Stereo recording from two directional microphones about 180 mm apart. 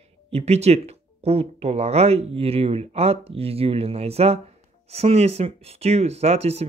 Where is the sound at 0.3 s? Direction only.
35° right (ahead or behind).